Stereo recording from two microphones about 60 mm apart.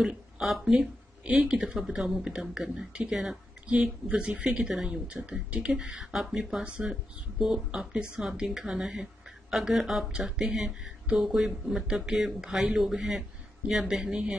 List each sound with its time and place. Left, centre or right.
0.4 s speech: centre
10.1 s speech: centre